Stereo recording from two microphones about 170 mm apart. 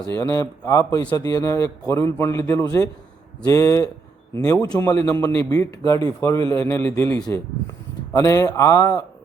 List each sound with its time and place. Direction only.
0.1 s a man's voice: 20° left (ahead or behind)